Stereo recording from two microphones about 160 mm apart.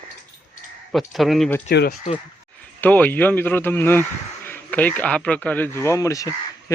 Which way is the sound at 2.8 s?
10° left (ahead or behind).